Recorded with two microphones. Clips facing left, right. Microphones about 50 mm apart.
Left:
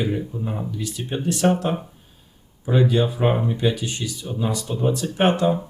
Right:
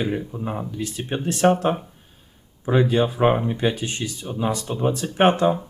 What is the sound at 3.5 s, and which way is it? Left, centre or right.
Speech, right.